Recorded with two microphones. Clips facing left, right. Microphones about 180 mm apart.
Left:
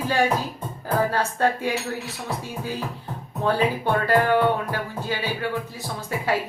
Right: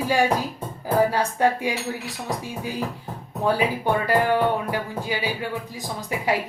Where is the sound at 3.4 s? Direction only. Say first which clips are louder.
Even; 10° right (ahead or behind).